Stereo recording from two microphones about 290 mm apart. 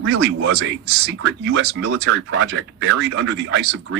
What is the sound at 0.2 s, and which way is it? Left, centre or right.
A man's voice, right.